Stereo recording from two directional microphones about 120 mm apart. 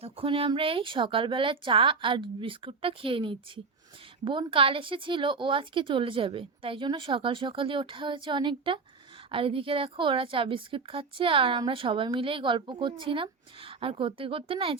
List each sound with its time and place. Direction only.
0.0 s a woman's voice: 50° right (ahead or behind)